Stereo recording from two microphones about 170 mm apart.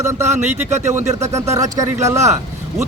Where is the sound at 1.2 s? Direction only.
15° right (ahead or behind).